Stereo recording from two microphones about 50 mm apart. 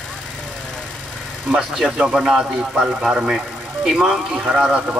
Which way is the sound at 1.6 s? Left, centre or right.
Centre.